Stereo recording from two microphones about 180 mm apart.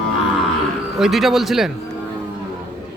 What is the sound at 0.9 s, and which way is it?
Speech, centre (ahead or behind).